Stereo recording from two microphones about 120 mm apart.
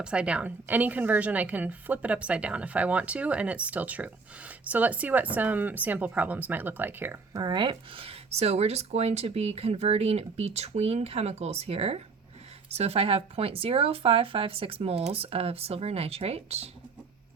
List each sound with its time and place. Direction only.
0.0 s a woman's voice: 10° right (ahead or behind)
7.4 s speech: 40° right (ahead or behind); by 16.6 s 60° right (ahead or behind)